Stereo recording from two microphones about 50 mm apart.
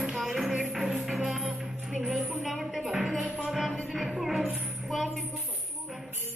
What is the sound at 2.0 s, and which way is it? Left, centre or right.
Music, right.